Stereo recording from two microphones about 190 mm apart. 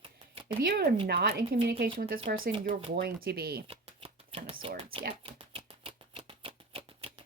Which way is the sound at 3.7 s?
30° right (ahead or behind).